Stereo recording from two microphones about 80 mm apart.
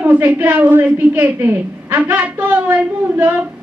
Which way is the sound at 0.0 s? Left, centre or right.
Centre.